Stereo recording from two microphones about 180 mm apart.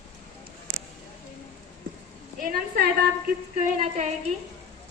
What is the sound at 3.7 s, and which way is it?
Speech, 40° right (ahead or behind).